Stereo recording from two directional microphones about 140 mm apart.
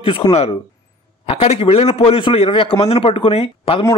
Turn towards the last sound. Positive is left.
turn(degrees=45)  # may be behind; listen again after turning